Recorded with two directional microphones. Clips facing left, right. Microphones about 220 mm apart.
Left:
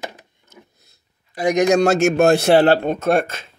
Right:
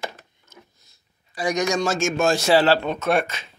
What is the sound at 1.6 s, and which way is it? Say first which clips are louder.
A man's voice: left 10 dB; 65° left (ahead or behind).